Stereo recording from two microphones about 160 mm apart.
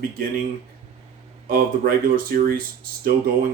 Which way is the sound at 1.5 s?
65° right (ahead or behind).